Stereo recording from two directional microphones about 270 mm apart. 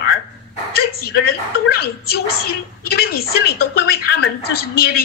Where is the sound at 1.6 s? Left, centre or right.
Left.